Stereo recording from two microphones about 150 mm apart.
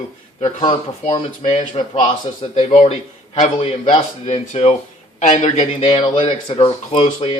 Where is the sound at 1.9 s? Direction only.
40° left (ahead or behind).